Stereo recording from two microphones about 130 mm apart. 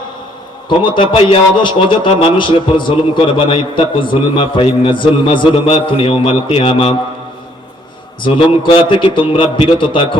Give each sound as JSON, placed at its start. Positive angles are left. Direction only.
{"t": 0.7, "sound": "a man's voice", "side_deg": 40}
{"t": 8.2, "sound": "a man's voice", "side_deg": 40}